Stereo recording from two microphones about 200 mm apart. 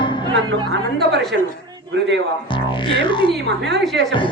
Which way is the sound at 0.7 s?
60° right (ahead or behind).